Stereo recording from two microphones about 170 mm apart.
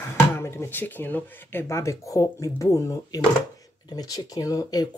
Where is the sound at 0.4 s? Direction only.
15° left (ahead or behind).